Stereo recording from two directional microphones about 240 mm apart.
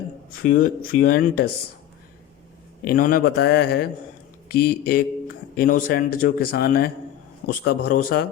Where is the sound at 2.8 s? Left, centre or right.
Left.